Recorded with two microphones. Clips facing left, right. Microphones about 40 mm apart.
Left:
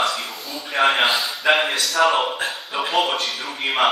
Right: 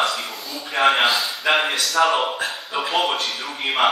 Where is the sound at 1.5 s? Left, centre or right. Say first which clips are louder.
Left 1 dB; centre.